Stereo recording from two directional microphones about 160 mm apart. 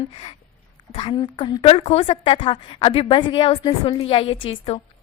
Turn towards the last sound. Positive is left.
turn(degrees=35)  # may be behind; listen again after turning